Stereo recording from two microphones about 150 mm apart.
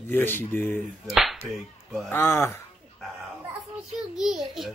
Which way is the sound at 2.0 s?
15° left (ahead or behind).